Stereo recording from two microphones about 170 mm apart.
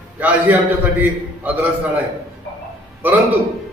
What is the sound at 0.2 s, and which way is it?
A man's voice, 10° right (ahead or behind).